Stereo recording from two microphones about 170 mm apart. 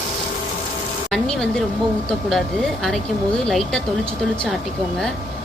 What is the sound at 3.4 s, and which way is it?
Speech, 5° left (ahead or behind).